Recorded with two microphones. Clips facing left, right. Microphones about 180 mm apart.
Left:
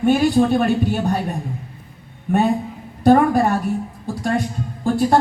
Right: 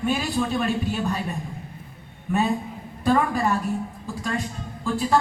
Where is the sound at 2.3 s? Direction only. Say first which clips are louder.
Left 5 dB; 60° left (ahead or behind).